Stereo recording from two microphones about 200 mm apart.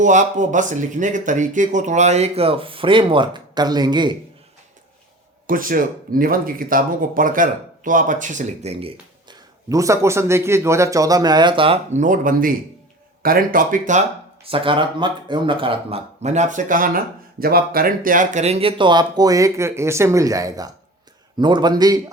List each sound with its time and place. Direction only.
0.0 s speech: 40° right (ahead or behind); by 4.1 s 20° right (ahead or behind)
5.5 s speech: 45° right (ahead or behind)
9.6 s a man's voice: 15° right (ahead or behind); by 14.0 s 40° right (ahead or behind)
14.4 s speech: 25° right (ahead or behind)